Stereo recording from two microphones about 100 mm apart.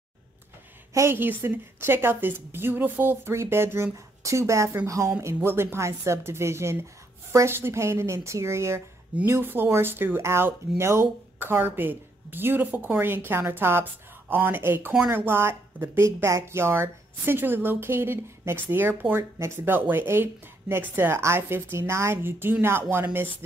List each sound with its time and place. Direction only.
0.9 s speech: 25° right (ahead or behind)